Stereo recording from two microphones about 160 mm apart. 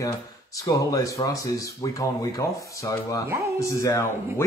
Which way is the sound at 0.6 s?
20° left (ahead or behind).